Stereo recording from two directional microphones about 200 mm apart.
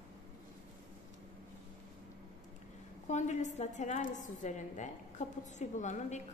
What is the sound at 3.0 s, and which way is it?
A woman's voice, 35° left (ahead or behind).